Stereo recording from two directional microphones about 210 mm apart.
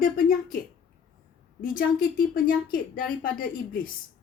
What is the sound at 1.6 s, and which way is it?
A woman's voice, 40° left (ahead or behind).